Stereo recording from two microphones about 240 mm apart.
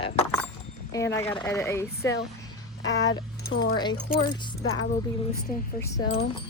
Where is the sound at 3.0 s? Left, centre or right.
Left.